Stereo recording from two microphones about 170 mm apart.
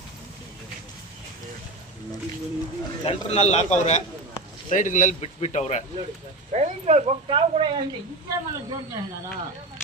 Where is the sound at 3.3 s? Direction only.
40° left (ahead or behind).